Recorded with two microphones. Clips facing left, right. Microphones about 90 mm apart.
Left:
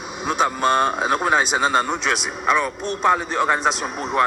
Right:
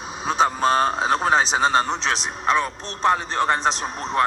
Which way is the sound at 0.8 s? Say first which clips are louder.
Even; 5° left (ahead or behind).